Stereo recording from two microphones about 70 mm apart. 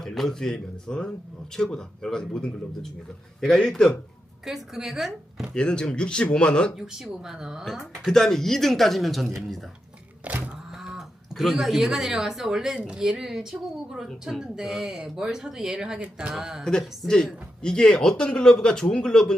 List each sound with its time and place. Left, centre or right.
0.0 s speech: centre
4.4 s speech: centre
5.5 s speech: centre
6.7 s speech: centre
7.6 s speech: centre
10.2 s a sound: right
10.8 s speech: centre
16.3 s speech: centre
17.6 s speech: centre